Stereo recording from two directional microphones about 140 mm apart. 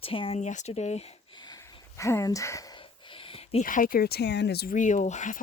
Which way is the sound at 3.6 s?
80° left.